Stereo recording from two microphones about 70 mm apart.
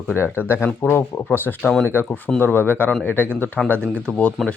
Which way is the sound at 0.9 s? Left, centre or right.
Left.